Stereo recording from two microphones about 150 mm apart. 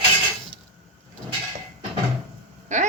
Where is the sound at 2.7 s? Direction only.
50° right (ahead or behind).